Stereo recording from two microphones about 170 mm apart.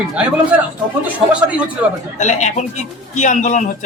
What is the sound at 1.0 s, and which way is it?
Speech, 10° right (ahead or behind).